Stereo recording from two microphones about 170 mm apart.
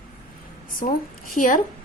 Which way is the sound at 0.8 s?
50° left (ahead or behind).